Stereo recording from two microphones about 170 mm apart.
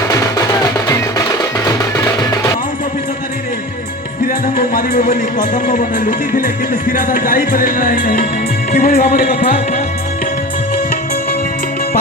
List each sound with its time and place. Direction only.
0.1 s music: 20° left (ahead or behind)
4.2 s speech: 55° left (ahead or behind)